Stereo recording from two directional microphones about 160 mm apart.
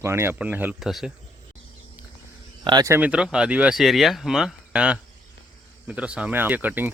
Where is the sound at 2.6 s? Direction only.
25° right (ahead or behind).